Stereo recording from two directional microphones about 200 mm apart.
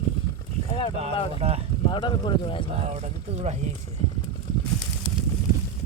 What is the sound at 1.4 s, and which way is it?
Speech, 30° right (ahead or behind).